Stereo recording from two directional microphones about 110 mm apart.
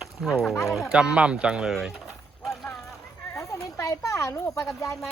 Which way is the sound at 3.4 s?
30° left (ahead or behind).